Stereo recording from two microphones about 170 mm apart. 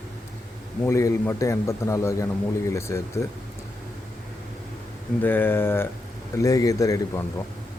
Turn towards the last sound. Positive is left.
turn(degrees=20)  # may be behind; listen again after turning